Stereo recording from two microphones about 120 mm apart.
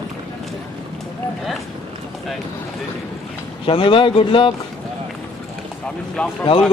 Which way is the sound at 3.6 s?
45° left (ahead or behind).